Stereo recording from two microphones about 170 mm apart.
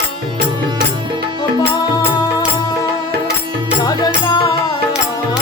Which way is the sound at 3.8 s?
25° left (ahead or behind).